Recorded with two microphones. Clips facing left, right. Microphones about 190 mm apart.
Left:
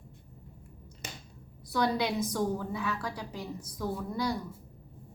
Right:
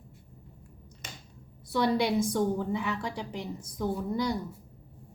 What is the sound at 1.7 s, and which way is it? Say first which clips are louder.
A woman's voice: right 3 dB; 25° right (ahead or behind).